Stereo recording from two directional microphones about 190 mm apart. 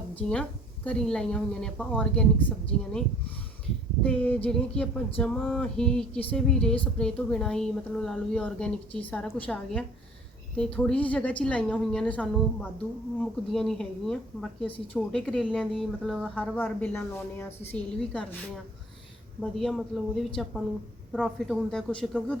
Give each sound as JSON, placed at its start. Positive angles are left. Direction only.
{"t": 0.2, "sound": "speech", "side_deg": 5}
{"t": 4.0, "sound": "a woman's voice", "side_deg": 5}
{"t": 19.4, "sound": "speech", "side_deg": 0}